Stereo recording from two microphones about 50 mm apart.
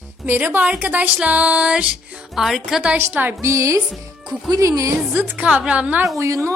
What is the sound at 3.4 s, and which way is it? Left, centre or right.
Speech, right.